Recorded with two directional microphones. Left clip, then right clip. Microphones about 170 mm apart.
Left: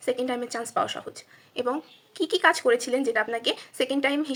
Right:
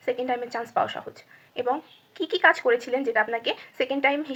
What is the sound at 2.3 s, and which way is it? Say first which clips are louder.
A woman's voice: right 1 dB; 50° left (ahead or behind).